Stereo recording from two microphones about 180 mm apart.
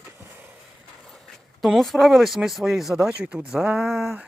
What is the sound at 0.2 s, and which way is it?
Skateboard, 10° right (ahead or behind).